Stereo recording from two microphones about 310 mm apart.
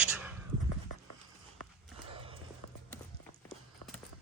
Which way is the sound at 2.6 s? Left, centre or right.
Left.